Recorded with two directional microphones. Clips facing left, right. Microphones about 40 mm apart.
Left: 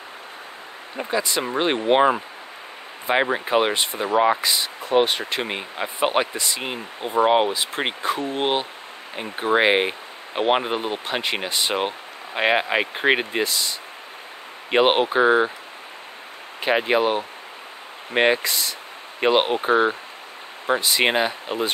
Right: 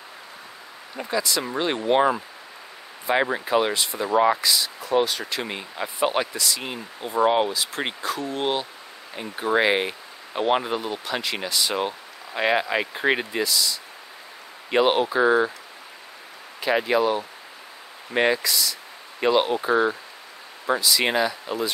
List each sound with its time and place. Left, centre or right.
0.9 s speech: left
4.1 s speech: left
4.4 s speech: left
16.5 s speech: left